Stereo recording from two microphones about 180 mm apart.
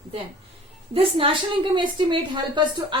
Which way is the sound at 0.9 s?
30° right (ahead or behind).